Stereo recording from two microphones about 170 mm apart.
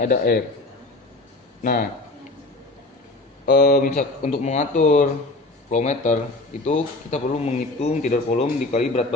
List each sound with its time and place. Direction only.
0.0 s a man's voice: 60° left (ahead or behind)
1.6 s a man's voice: 55° left (ahead or behind)
3.4 s speech: 80° left
3.8 s a man's voice: 50° left (ahead or behind)